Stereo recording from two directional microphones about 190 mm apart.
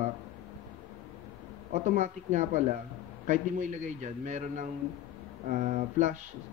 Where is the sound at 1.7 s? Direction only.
40° right (ahead or behind).